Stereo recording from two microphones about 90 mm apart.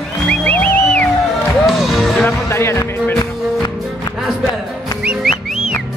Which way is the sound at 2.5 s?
30° left (ahead or behind).